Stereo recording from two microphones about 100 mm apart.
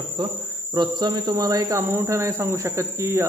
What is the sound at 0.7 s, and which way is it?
Cricket, 45° right (ahead or behind).